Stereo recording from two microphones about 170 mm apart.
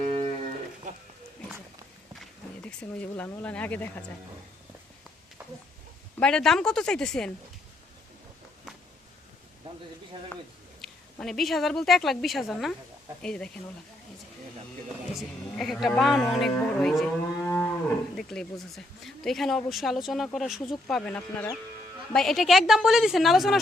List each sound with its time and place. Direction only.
0.0 s cattle: 35° right (ahead or behind)
2.1 s speech: 5° left (ahead or behind)
6.1 s cattle: 5° left (ahead or behind)
10.8 s speech: centre (ahead or behind)
13.2 s cattle: 5° left (ahead or behind)
15.1 s cattle: centre (ahead or behind)